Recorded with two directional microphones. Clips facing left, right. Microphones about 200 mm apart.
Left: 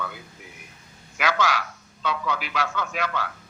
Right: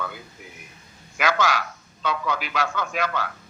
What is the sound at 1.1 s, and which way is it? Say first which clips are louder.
A man's voice: right 1 dB; 45° right (ahead or behind).